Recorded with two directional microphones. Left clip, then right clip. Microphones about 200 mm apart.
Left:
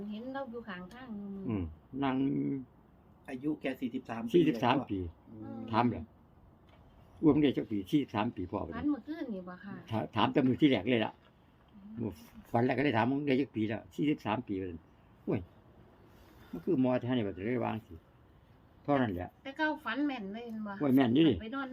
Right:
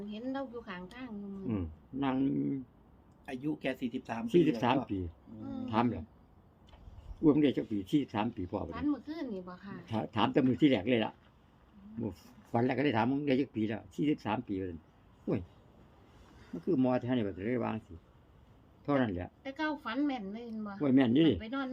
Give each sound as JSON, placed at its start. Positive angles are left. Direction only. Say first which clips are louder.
{"t": 0.1, "sound": "a sound", "louder": "right 2 dB", "side_deg": -50}
{"t": 1.5, "sound": "speech", "louder": "even", "side_deg": 5}
{"t": 3.2, "sound": "a woman's voice", "louder": "even", "side_deg": -45}
{"t": 4.3, "sound": "speech", "louder": "even", "side_deg": 5}
{"t": 7.3, "sound": "speech", "louder": "even", "side_deg": 5}
{"t": 8.7, "sound": "a woman's voice", "louder": "even", "side_deg": -50}
{"t": 9.8, "sound": "speech", "louder": "left 1 dB", "side_deg": 5}
{"t": 16.6, "sound": "speech", "louder": "even", "side_deg": 5}
{"t": 18.9, "sound": "speech", "louder": "left 1 dB", "side_deg": 0}
{"t": 19.4, "sound": "a woman's voice", "louder": "left 3 dB", "side_deg": -50}
{"t": 20.8, "sound": "speech", "louder": "even", "side_deg": 0}
{"t": 21.3, "sound": "a woman's voice", "louder": "right 1 dB", "side_deg": -50}